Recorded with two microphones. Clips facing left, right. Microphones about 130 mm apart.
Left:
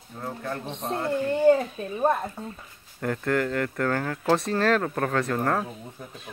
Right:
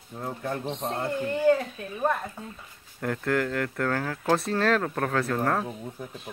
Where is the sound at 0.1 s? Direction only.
20° right (ahead or behind).